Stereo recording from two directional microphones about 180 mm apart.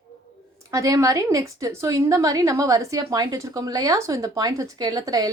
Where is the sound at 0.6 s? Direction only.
20° right (ahead or behind).